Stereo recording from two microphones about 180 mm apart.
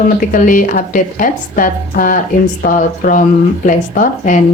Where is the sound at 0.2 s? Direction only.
50° left (ahead or behind).